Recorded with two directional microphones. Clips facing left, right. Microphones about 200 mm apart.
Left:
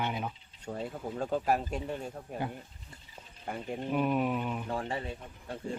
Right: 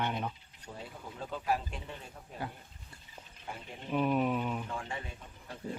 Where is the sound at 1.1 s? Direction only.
45° left (ahead or behind).